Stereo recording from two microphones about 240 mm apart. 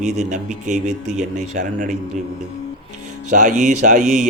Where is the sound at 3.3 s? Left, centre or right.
Right.